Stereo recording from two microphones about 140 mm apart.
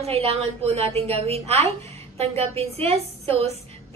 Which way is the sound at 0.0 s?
45° right (ahead or behind).